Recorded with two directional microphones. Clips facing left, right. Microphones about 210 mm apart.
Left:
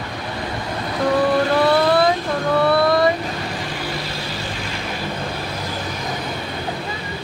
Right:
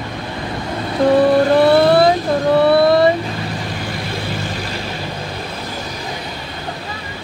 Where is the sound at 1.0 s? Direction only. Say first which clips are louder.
Right 6 dB; 30° right (ahead or behind).